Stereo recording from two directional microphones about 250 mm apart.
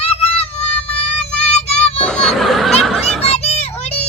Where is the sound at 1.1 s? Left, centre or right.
Centre.